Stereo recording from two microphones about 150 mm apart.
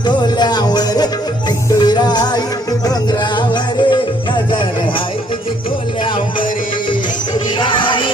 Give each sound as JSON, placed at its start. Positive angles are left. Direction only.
{"t": 0.0, "sound": "music", "side_deg": 30}
{"t": 7.6, "sound": "music", "side_deg": 35}